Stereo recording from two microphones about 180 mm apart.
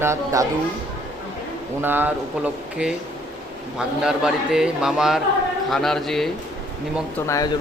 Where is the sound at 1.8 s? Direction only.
10° right (ahead or behind).